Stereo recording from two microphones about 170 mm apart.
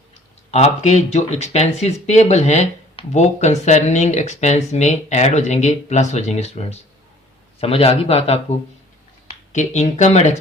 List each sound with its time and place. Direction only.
0.5 s speech: 40° left (ahead or behind)